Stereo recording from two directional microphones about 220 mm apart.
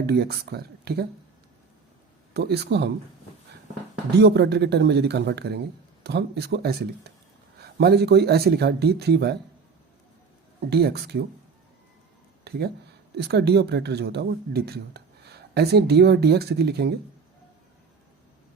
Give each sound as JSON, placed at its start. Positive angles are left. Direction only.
{"t": 0.0, "sound": "speech", "side_deg": -45}
{"t": 2.3, "sound": "speech", "side_deg": -50}
{"t": 4.1, "sound": "speech", "side_deg": -50}
{"t": 10.7, "sound": "speech", "side_deg": -45}
{"t": 12.5, "sound": "speech", "side_deg": -45}